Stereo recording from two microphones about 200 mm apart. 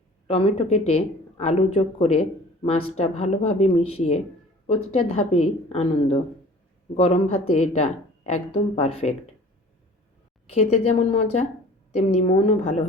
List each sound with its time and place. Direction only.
0.3 s speech: 30° left (ahead or behind)
10.5 s speech: 30° left (ahead or behind)